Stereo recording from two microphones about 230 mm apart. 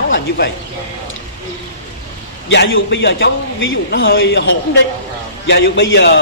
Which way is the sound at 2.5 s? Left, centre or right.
Left.